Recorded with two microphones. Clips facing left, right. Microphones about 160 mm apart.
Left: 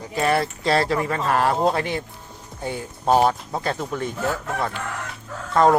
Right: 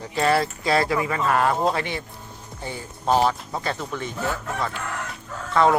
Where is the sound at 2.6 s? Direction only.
55° left (ahead or behind).